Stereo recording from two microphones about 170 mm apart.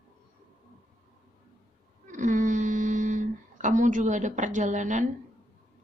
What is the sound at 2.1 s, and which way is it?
Speech, 50° right (ahead or behind).